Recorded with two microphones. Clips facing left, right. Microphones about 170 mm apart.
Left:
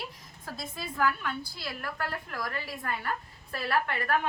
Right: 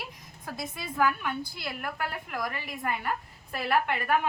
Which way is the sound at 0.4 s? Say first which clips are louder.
Right 2 dB; 15° right (ahead or behind).